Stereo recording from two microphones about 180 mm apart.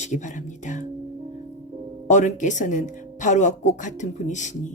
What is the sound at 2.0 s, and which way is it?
Speech, 45° left (ahead or behind).